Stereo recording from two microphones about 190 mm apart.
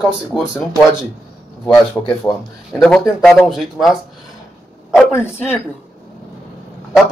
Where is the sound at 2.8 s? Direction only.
5° left (ahead or behind).